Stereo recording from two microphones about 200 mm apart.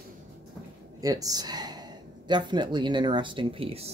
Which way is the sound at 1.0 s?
20° right (ahead or behind).